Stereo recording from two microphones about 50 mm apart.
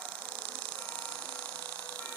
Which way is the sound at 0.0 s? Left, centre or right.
Left.